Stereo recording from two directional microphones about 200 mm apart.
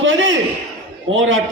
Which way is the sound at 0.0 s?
70° right (ahead or behind).